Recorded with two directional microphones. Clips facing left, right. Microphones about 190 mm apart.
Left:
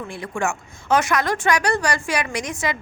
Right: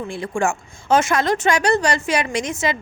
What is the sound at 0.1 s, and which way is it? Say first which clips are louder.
Speech: right 4 dB; 30° right (ahead or behind).